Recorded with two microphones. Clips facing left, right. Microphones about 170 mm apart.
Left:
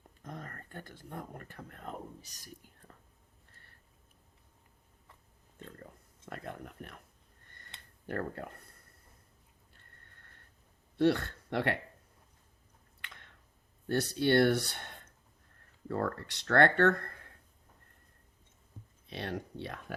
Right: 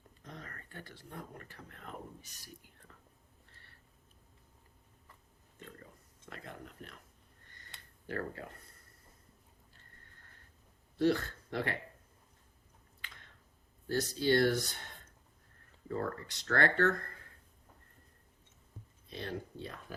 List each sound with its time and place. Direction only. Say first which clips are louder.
0.3 s a sound: left 4 dB; 50° left (ahead or behind)
6.2 s a sound: left 5 dB; 55° left (ahead or behind)
10.9 s speech: left 2 dB; 65° left (ahead or behind)
13.8 s speech: left 2 dB; 65° left (ahead or behind)
15.9 s speech: left 3 dB; 70° left (ahead or behind)
19.1 s speech: left 2 dB; 70° left (ahead or behind)